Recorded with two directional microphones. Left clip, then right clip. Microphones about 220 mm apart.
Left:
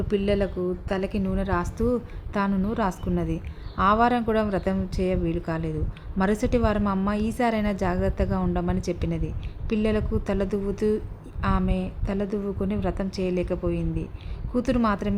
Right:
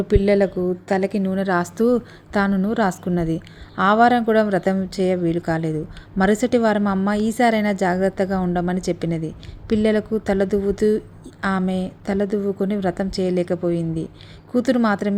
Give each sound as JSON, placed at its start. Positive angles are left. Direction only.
{"t": 0.1, "sound": "a woman's voice", "side_deg": -25}